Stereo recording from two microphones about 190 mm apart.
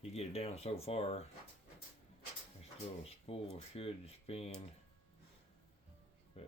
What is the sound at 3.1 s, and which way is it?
Speech, 30° left (ahead or behind).